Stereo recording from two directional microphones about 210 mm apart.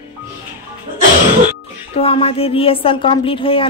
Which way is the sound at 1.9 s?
25° left (ahead or behind).